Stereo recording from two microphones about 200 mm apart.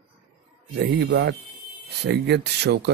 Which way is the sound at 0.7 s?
60° right (ahead or behind).